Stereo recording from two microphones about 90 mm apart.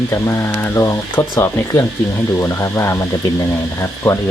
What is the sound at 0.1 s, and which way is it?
Speech, 30° left (ahead or behind).